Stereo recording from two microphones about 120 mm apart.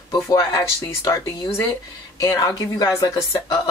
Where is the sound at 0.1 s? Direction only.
30° left (ahead or behind).